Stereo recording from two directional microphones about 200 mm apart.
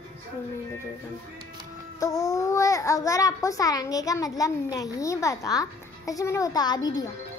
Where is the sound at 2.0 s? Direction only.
15° left (ahead or behind).